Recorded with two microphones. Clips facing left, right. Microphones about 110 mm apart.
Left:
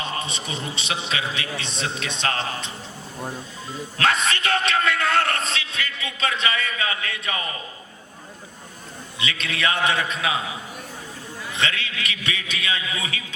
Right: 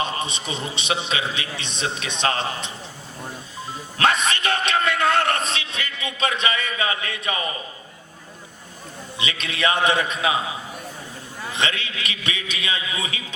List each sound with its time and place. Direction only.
0.0 s a man's voice: 20° right (ahead or behind)
3.7 s music: 20° right (ahead or behind)
9.1 s a man's voice: 20° right (ahead or behind)
11.5 s a man's voice: 20° right (ahead or behind)